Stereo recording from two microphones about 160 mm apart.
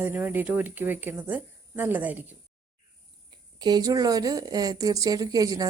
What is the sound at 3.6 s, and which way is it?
A woman's voice, 25° right (ahead or behind).